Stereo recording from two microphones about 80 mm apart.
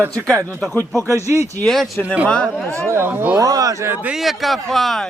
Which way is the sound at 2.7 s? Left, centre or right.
Right.